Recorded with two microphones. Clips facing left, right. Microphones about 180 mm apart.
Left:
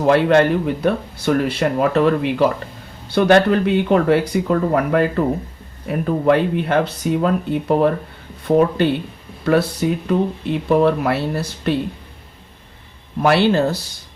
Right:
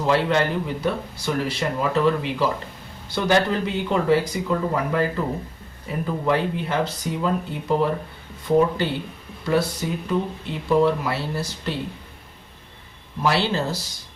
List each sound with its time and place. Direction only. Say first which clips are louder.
0.0 s speech: left 7 dB; 55° left (ahead or behind)
13.2 s speech: left 7 dB; 60° left (ahead or behind)